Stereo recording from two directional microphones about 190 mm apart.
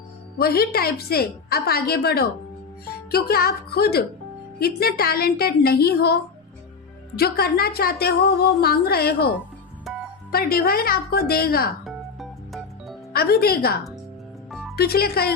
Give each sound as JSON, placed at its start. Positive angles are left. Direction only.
{"t": 0.3, "sound": "a woman's voice", "side_deg": 55}
{"t": 7.2, "sound": "a woman's voice", "side_deg": 55}
{"t": 10.3, "sound": "a woman's voice", "side_deg": 50}
{"t": 11.9, "sound": "music", "side_deg": 0}
{"t": 13.1, "sound": "a woman's voice", "side_deg": 55}
{"t": 14.5, "sound": "music", "side_deg": 0}
{"t": 14.8, "sound": "a woman's voice", "side_deg": 55}